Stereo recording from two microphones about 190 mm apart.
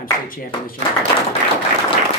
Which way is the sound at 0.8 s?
40° right (ahead or behind).